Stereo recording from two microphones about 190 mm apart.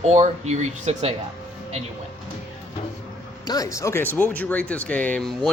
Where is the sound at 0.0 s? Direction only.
35° right (ahead or behind).